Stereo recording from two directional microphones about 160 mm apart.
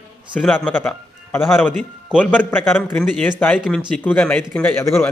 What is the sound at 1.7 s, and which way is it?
Speech, 5° right (ahead or behind).